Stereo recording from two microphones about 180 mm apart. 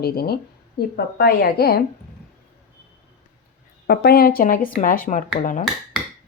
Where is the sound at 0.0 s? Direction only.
60° left (ahead or behind).